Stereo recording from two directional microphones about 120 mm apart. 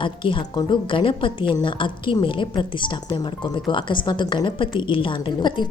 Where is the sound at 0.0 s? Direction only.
45° left (ahead or behind).